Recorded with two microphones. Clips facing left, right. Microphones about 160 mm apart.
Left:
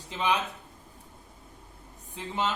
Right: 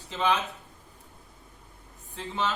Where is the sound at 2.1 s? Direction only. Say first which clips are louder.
Even; 15° left (ahead or behind).